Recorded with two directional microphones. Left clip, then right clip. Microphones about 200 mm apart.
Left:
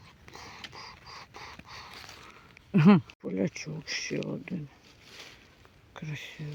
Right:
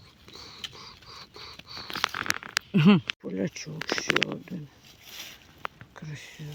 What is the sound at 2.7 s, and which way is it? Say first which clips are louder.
Speech: even; centre (ahead or behind).